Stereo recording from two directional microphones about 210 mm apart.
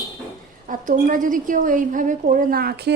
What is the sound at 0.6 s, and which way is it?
A woman's voice, 40° right (ahead or behind).